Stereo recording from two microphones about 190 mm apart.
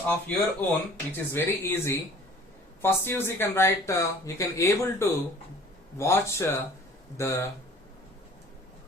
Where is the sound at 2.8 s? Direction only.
10° left (ahead or behind).